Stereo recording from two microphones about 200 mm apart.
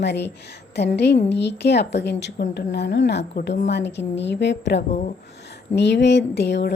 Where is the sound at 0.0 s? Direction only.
60° left (ahead or behind).